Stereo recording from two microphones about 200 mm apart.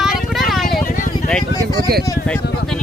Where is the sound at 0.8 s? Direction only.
40° left (ahead or behind).